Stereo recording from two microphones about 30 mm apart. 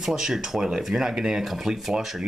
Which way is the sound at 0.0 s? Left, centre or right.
Centre.